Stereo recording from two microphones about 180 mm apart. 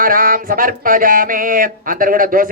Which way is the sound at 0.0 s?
50° right (ahead or behind).